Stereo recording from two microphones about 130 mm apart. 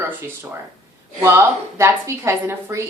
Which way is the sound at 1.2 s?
20° right (ahead or behind).